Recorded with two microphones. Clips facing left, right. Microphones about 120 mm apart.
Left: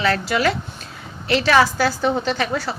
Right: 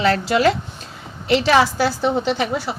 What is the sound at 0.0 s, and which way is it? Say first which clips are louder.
Speech: right 3 dB; 35° right (ahead or behind).